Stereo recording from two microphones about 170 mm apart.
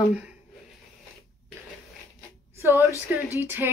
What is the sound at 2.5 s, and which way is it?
A woman's voice, 15° right (ahead or behind).